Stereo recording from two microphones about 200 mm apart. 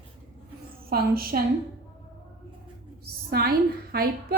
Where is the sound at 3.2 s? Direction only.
50° right (ahead or behind).